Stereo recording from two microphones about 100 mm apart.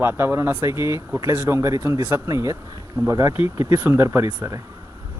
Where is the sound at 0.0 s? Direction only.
25° right (ahead or behind).